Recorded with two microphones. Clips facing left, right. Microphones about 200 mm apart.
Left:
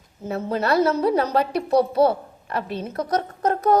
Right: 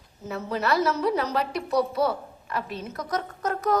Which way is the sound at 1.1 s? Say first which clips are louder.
Left 5 dB; 30° left (ahead or behind).